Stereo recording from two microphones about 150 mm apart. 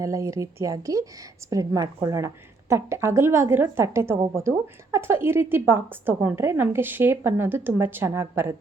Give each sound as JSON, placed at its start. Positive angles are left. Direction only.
{"t": 0.0, "sound": "speech", "side_deg": -20}